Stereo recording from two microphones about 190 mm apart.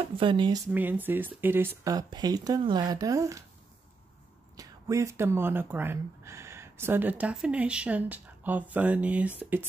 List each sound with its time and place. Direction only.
0.1 s speech: 25° right (ahead or behind)
0.7 s speech: 10° right (ahead or behind)
4.6 s speech: 15° right (ahead or behind)